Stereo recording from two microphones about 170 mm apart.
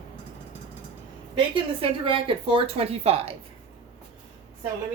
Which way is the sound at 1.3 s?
30° right (ahead or behind).